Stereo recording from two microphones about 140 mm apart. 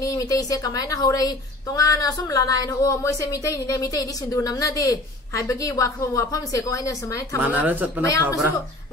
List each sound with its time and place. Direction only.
0.0 s a woman's voice: 25° left (ahead or behind)
7.4 s speech: 10° right (ahead or behind)
8.0 s a woman's voice: 25° left (ahead or behind)